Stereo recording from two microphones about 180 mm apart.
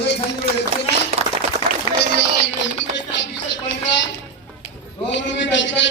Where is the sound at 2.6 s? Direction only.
85° left.